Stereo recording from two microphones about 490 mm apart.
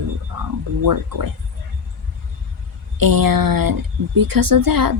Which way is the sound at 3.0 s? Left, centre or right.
Right.